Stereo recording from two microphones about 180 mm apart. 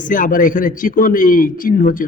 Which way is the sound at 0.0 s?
50° left (ahead or behind).